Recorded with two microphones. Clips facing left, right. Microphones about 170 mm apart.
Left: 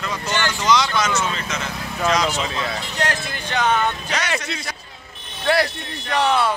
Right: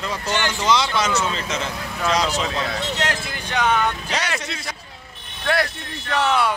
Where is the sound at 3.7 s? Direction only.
15° left (ahead or behind).